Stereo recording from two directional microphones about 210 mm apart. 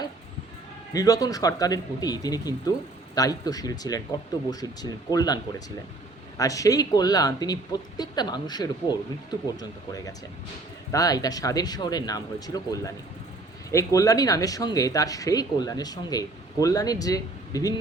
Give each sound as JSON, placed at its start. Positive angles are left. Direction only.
{"t": 0.9, "sound": "speech", "side_deg": 15}